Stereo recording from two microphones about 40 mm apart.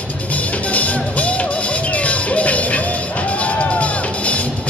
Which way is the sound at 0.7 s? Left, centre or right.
Left.